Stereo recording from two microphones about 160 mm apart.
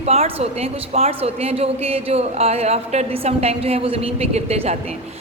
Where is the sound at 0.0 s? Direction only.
40° right (ahead or behind).